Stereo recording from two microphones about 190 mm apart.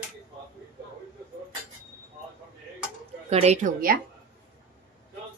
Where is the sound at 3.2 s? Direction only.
35° right (ahead or behind).